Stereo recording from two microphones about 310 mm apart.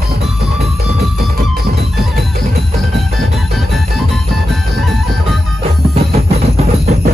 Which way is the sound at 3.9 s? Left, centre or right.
Centre.